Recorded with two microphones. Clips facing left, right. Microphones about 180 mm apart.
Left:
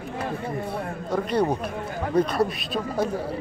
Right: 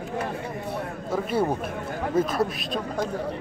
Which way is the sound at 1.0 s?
5° right (ahead or behind).